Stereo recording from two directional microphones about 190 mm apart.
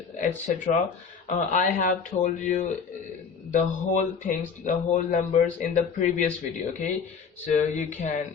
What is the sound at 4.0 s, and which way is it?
Speech, 40° left (ahead or behind).